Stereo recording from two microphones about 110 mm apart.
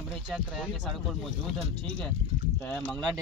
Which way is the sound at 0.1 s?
5° right (ahead or behind).